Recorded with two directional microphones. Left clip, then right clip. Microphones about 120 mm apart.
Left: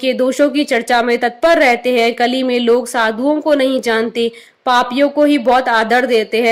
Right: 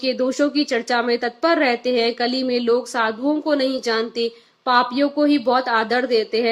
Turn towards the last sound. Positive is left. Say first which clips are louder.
# left 6 dB
turn(degrees=40)  # may be behind; listen again after turning